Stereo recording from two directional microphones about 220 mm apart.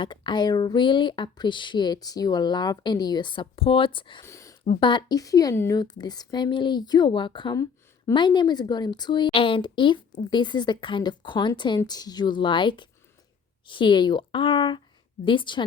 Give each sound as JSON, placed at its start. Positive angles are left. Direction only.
{"t": 0.0, "sound": "a woman's voice", "side_deg": 20}